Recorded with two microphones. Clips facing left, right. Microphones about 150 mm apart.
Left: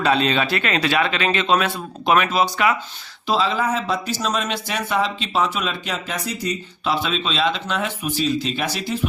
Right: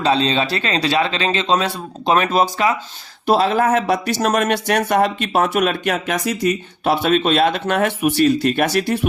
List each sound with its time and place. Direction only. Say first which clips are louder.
0.0 s speech: right 2 dB; 25° right (ahead or behind)
3.2 s speech: right 5 dB; 55° right (ahead or behind)
3.7 s speech: right 6 dB; 70° right (ahead or behind); by 6.5 s 90° right
6.5 s speech: right 2 dB; 50° right (ahead or behind); by 8.3 s 70° right (ahead or behind)
8.3 s speech: right 6 dB; 55° right (ahead or behind)